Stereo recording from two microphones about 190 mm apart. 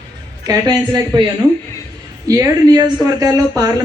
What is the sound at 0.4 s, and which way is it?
Speech, 20° right (ahead or behind).